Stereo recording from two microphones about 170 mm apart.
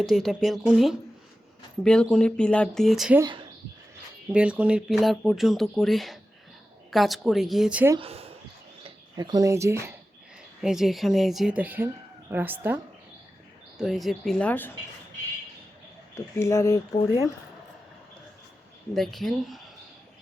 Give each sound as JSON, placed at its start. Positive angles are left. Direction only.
{"t": 0.0, "sound": "speech", "side_deg": 0}
{"t": 3.2, "sound": "speech", "side_deg": -25}
{"t": 4.3, "sound": "speech", "side_deg": -5}
{"t": 7.9, "sound": "speech", "side_deg": -35}
{"t": 9.1, "sound": "speech", "side_deg": -25}
{"t": 10.6, "sound": "speech", "side_deg": 0}
{"t": 13.7, "sound": "speech", "side_deg": 0}
{"t": 16.1, "sound": "speech", "side_deg": 15}
{"t": 18.9, "sound": "speech", "side_deg": 0}